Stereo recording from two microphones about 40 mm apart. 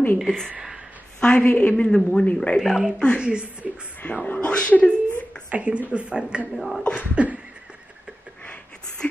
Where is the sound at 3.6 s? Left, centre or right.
Right.